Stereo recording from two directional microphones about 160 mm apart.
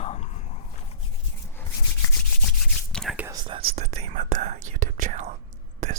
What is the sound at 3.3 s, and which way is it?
Whispering, 35° right (ahead or behind).